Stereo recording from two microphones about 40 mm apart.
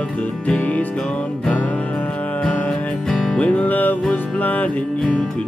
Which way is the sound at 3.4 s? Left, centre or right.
Left.